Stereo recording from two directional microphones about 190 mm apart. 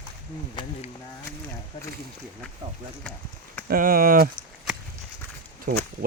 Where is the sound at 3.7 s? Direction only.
50° right (ahead or behind).